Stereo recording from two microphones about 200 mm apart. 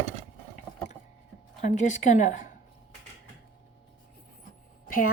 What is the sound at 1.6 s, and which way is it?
Speech, 35° left (ahead or behind).